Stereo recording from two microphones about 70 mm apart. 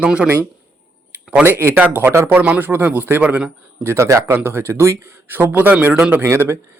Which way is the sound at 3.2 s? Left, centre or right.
Centre.